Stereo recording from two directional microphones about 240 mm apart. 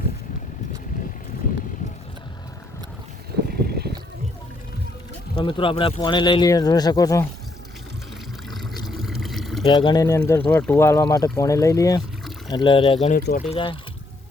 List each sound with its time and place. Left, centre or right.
3.5 s a sound: right
5.3 s speech: left
8.4 s pour: centre
9.6 s speech: centre
13.1 s speech: left
13.5 s speech: left